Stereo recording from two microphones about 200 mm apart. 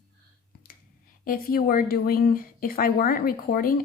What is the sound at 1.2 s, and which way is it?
Speech, 45° left (ahead or behind).